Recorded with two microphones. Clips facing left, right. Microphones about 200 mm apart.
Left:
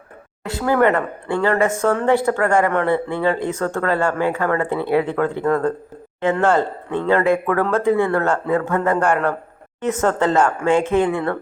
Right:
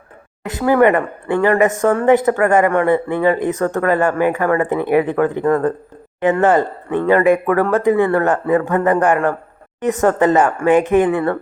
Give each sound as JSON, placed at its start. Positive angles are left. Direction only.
{"t": 0.4, "sound": "a woman's voice", "side_deg": -15}